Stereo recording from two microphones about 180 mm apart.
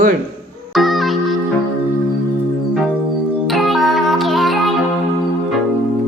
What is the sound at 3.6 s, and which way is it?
Music, centre (ahead or behind).